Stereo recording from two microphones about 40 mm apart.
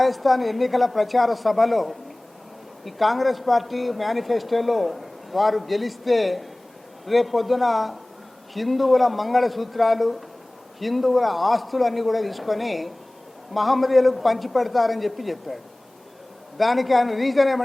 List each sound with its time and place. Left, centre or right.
0.0 s speech: centre